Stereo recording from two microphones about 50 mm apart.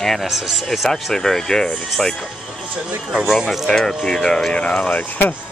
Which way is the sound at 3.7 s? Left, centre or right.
Centre.